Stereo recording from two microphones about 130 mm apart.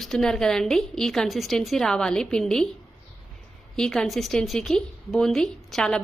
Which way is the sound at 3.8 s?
5° left (ahead or behind).